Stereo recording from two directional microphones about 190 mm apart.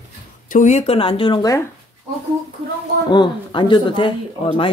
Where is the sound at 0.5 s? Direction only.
40° left (ahead or behind); by 1.6 s 20° left (ahead or behind).